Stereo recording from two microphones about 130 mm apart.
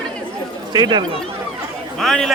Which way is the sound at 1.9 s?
Centre (ahead or behind).